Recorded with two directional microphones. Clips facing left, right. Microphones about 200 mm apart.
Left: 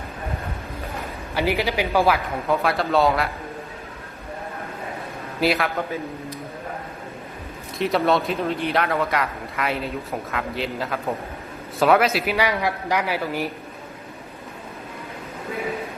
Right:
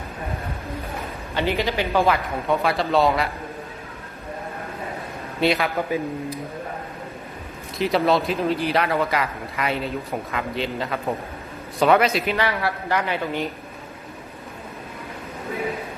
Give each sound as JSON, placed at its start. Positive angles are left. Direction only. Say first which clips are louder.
{"t": 1.3, "sound": "a man's voice", "louder": "left 1 dB", "side_deg": 10}
{"t": 5.4, "sound": "speech", "louder": "right 1 dB", "side_deg": 0}
{"t": 5.7, "sound": "a man's voice", "louder": "right 3 dB", "side_deg": -15}
{"t": 7.8, "sound": "a man's voice", "louder": "right 1 dB", "side_deg": 0}